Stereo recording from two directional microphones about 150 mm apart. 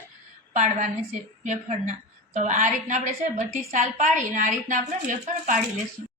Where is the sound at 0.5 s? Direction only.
50° right (ahead or behind).